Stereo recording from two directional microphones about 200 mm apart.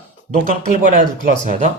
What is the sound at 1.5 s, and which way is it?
Speech, 40° right (ahead or behind).